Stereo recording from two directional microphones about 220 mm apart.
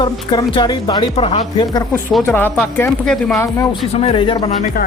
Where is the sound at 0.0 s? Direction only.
20° left (ahead or behind).